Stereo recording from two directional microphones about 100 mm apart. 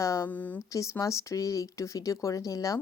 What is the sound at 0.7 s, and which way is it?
Speech, 35° left (ahead or behind).